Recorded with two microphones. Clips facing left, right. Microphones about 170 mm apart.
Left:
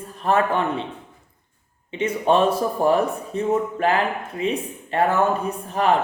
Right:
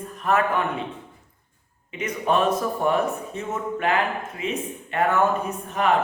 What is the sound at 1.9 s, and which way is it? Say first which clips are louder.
Speech: left 4 dB; 30° left (ahead or behind).